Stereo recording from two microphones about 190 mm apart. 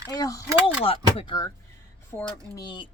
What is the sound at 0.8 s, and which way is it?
Speech, 30° left (ahead or behind).